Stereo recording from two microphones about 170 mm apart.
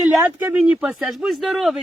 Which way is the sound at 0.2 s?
10° right (ahead or behind).